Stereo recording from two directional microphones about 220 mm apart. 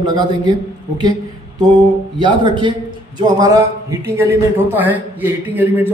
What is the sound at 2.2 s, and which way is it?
A man's voice, 20° right (ahead or behind).